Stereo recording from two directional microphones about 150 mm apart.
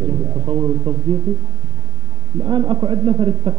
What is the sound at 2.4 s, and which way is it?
A man's voice, 30° right (ahead or behind).